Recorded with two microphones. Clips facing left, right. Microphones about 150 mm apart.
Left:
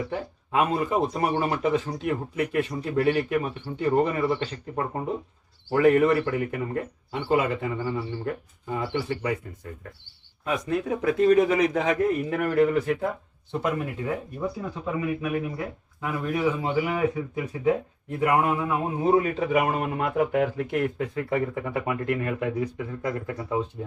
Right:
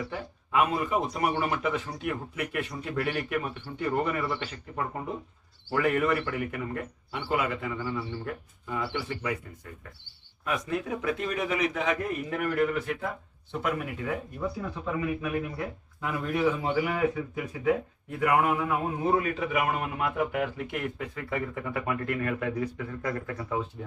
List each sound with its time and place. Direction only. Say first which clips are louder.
0.0 s a man's voice: left 5 dB; 30° left (ahead or behind)
8.9 s a man's voice: left 5 dB; 35° left (ahead or behind)
10.4 s a man's voice: left 4 dB; 30° left (ahead or behind)